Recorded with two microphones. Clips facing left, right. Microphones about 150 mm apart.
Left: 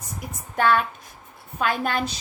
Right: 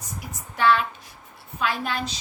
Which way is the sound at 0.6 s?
45° left (ahead or behind).